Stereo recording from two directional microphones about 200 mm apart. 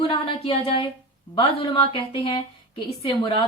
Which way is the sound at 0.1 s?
25° left (ahead or behind).